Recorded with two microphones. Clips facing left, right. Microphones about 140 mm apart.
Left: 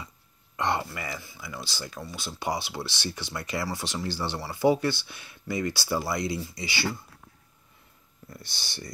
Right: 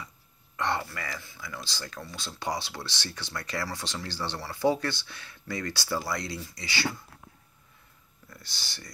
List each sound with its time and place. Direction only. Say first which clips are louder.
0.6 s speech: left 2 dB; 15° left (ahead or behind)
8.5 s speech: left 4 dB; 20° left (ahead or behind)